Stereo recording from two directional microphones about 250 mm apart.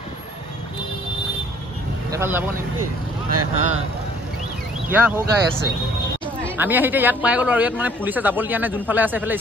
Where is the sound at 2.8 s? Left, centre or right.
Right.